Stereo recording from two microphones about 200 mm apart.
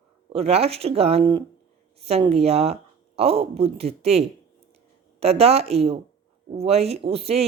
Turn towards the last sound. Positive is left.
turn(degrees=-30)  # may be behind; listen again after turning